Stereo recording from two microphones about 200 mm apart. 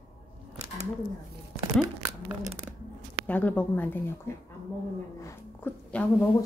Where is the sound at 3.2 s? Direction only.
10° left (ahead or behind).